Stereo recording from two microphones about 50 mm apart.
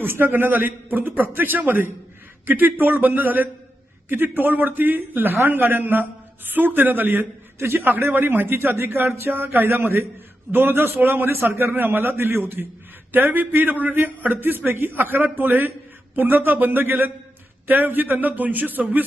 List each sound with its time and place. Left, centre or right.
0.0 s a man's voice: right
9.7 s a man's voice: right
10.5 s a man's voice: right